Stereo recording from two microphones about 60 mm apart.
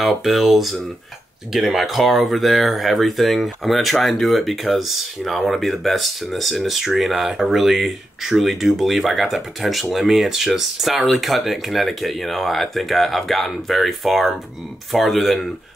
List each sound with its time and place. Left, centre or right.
0.0 s speech: centre